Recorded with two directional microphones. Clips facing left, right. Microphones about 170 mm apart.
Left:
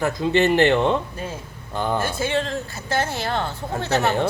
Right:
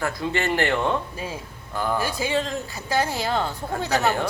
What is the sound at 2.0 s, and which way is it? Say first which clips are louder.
Speech: left 1 dB; 15° right (ahead or behind).